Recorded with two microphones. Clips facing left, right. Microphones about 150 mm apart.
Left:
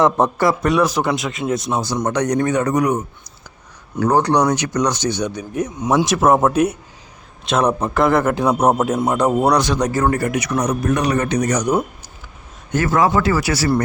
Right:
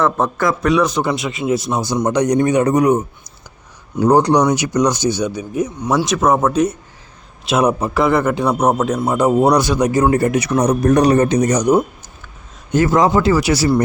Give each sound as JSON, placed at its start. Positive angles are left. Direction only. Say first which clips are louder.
{"t": 0.4, "sound": "a man's voice", "louder": "right 2 dB", "side_deg": 5}
{"t": 4.0, "sound": "a man's voice", "louder": "right 3 dB", "side_deg": -15}
{"t": 7.4, "sound": "a man's voice", "louder": "right 2 dB", "side_deg": -5}